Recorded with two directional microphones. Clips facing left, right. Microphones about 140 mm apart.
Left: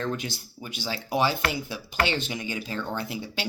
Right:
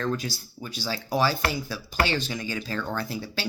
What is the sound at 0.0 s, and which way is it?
Speech, 20° left (ahead or behind).